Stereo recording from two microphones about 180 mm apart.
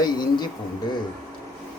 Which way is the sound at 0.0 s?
25° left (ahead or behind).